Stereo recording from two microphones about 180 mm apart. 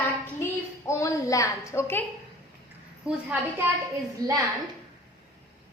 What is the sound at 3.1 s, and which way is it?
Speech, 5° right (ahead or behind).